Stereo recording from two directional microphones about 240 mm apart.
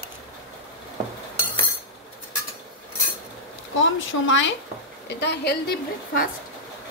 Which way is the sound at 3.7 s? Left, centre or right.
Left.